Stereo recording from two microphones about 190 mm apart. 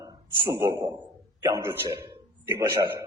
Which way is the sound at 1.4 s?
15° right (ahead or behind).